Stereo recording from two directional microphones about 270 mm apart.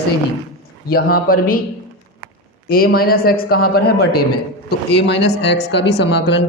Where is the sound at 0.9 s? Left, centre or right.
Left.